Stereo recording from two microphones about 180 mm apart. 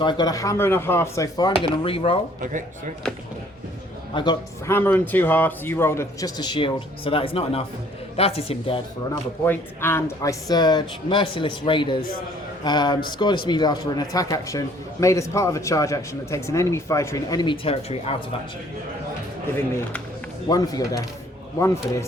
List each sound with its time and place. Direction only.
0.0 s speech: 25° left (ahead or behind)
2.4 s speech: 45° right (ahead or behind)
4.1 s a man's voice: 25° left (ahead or behind)
9.4 s speech: 15° left (ahead or behind); by 18.2 s 35° left (ahead or behind)
20.5 s speech: 20° left (ahead or behind)